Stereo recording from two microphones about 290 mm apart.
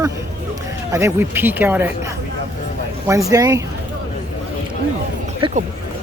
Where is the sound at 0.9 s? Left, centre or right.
Centre.